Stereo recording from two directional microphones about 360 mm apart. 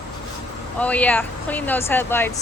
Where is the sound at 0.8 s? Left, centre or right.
Centre.